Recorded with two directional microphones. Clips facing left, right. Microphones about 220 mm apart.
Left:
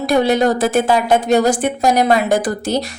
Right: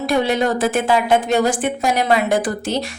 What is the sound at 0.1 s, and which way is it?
A woman's voice, 40° left (ahead or behind).